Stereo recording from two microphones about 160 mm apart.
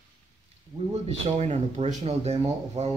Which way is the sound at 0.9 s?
40° right (ahead or behind).